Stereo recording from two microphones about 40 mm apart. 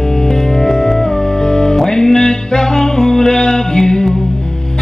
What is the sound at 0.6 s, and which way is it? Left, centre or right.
Music, centre.